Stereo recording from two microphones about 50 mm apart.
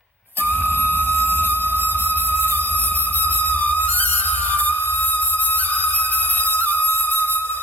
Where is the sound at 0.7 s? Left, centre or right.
Left.